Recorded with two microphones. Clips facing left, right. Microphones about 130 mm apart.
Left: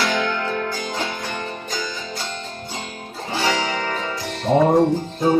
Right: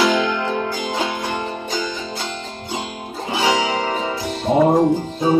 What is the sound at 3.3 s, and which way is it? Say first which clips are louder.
Music: right 3 dB; 15° right (ahead or behind).